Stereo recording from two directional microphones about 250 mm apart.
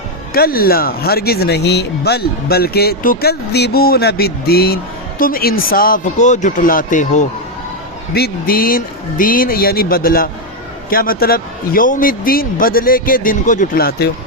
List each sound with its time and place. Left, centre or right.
0.3 s speech: left